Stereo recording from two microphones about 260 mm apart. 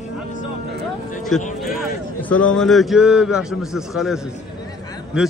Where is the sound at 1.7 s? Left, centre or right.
Centre.